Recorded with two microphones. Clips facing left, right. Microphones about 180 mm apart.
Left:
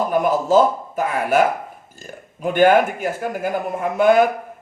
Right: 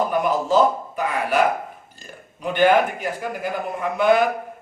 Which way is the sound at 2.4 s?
45° left (ahead or behind).